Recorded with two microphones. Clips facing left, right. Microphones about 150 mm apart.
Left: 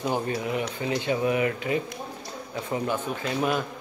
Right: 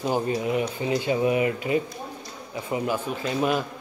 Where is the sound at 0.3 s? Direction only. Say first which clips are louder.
Right 3 dB; 20° right (ahead or behind).